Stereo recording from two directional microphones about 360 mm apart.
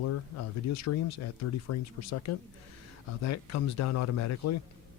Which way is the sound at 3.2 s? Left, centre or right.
Left.